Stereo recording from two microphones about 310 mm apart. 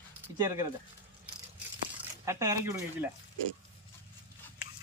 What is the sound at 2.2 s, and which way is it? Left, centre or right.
Speech, centre.